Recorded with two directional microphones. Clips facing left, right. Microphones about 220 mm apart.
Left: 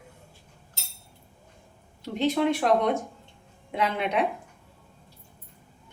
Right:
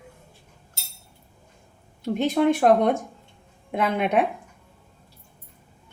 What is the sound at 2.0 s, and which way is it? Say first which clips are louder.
A woman's voice: right 4 dB; 50° right (ahead or behind).